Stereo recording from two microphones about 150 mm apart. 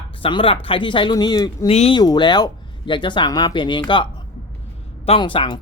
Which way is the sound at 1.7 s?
45° left (ahead or behind).